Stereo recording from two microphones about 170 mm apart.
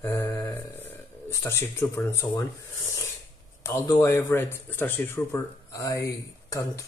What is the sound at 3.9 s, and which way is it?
Speech, 15° left (ahead or behind).